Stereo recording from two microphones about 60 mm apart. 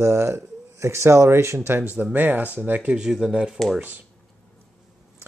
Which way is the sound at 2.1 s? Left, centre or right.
Right.